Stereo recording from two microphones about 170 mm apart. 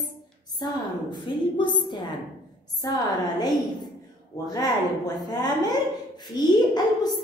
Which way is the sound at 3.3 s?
25° left (ahead or behind).